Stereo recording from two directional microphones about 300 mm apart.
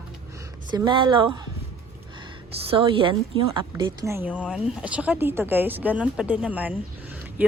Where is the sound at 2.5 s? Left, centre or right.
Centre.